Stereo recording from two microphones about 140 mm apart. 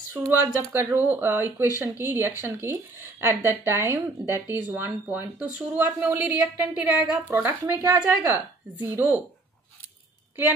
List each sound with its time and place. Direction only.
0.1 s speech: 15° right (ahead or behind)